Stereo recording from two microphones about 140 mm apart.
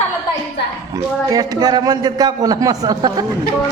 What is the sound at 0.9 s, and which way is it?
A man's voice, 25° right (ahead or behind).